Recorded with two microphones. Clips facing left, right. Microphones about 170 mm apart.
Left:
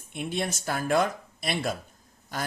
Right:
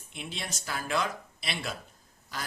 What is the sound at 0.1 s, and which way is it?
Speech, 50° left (ahead or behind).